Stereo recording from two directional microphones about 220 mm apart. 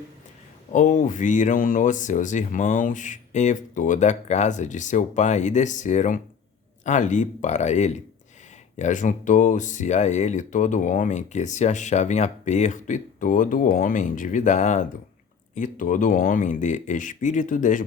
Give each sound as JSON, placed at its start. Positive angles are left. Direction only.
{"t": 0.7, "sound": "speech", "side_deg": 35}